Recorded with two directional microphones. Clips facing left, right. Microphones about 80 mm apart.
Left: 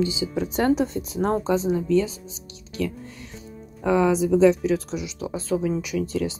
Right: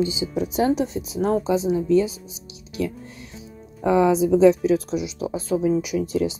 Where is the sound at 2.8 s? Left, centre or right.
Right.